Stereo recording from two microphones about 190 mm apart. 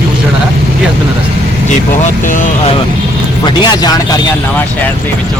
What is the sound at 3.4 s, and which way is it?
Speech, 20° left (ahead or behind).